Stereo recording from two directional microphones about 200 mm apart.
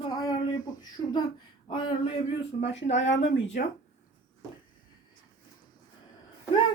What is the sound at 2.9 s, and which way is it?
Speech, 65° left (ahead or behind).